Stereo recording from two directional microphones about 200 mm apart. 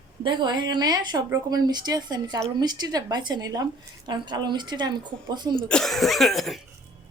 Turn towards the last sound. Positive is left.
turn(degrees=0)  # may be behind; listen again after turning